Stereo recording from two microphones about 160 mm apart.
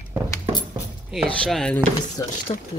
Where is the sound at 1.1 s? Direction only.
Centre (ahead or behind).